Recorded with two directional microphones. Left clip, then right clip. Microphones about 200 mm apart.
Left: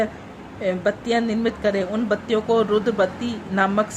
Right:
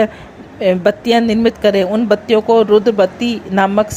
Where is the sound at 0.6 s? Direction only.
35° right (ahead or behind).